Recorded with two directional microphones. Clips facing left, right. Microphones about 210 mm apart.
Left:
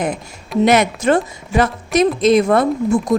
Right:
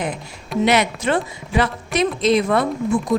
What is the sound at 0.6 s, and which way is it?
A woman's voice, 45° left (ahead or behind).